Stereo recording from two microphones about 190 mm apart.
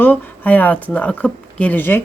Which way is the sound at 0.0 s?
10° left (ahead or behind).